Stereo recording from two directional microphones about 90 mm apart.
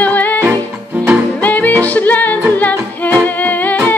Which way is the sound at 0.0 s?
20° left (ahead or behind).